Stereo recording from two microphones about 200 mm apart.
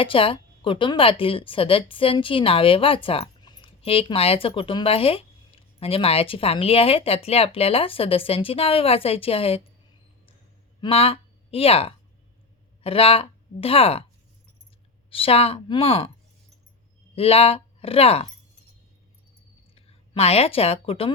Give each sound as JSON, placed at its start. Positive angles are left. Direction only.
{"t": 0.0, "sound": "speech", "side_deg": 25}
{"t": 10.8, "sound": "a woman's voice", "side_deg": 30}
{"t": 15.1, "sound": "speech", "side_deg": 30}
{"t": 17.2, "sound": "speech", "side_deg": 30}
{"t": 19.7, "sound": "a woman's voice", "side_deg": 30}